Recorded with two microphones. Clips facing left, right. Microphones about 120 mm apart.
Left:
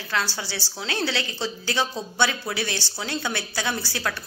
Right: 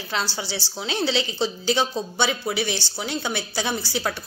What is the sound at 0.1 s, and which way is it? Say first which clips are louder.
A woman's voice: even; 20° right (ahead or behind).